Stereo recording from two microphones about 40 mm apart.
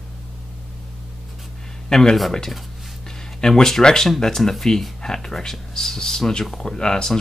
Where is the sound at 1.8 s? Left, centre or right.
Centre.